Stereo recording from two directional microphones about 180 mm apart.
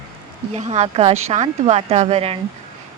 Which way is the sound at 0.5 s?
40° right (ahead or behind).